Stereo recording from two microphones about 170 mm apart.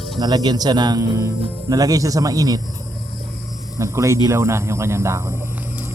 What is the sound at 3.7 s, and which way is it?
Speech, 20° right (ahead or behind).